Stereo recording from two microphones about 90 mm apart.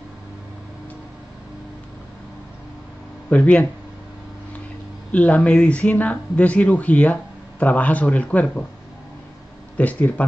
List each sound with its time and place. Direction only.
3.3 s speech: 15° left (ahead or behind)
5.1 s speech: 15° left (ahead or behind)
9.8 s speech: 15° left (ahead or behind)